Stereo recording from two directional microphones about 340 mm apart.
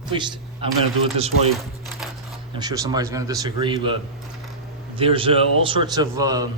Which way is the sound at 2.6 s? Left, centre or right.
Centre.